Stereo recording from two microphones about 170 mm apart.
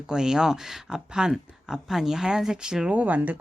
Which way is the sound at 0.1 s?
5° right (ahead or behind).